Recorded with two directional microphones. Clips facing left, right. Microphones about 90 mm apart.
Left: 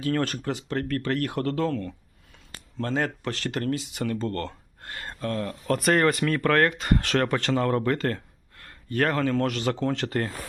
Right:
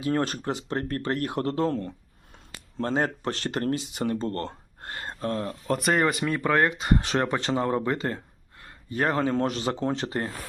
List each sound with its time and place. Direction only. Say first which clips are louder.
0.0 s speech: even; 25° right (ahead or behind)